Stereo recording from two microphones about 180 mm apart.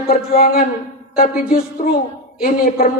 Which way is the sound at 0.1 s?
55° left (ahead or behind).